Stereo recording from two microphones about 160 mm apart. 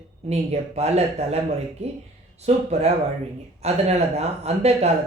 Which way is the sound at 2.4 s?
45° right (ahead or behind).